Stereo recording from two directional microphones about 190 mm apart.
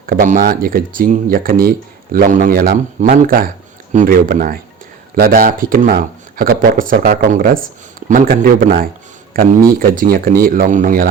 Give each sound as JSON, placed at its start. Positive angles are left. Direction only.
{"t": 0.0, "sound": "speech", "side_deg": -50}